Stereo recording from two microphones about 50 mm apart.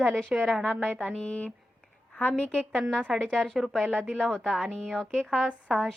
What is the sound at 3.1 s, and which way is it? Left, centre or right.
Speech, centre.